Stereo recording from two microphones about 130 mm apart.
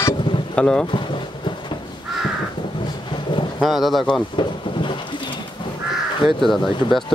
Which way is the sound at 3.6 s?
Centre (ahead or behind).